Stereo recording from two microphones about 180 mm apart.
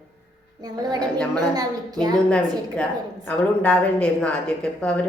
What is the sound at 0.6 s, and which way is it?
A child's voice, 25° right (ahead or behind).